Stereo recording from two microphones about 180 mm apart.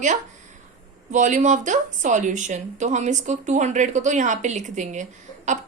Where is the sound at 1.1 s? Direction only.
45° right (ahead or behind).